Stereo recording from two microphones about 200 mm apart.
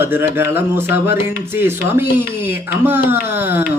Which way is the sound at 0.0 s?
10° right (ahead or behind).